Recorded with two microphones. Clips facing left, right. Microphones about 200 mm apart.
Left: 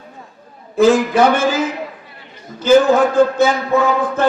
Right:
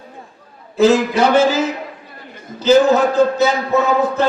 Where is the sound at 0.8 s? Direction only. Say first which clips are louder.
Left 1 dB; 55° left (ahead or behind).